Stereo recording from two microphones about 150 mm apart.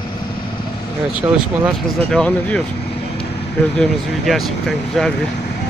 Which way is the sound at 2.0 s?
5° left (ahead or behind).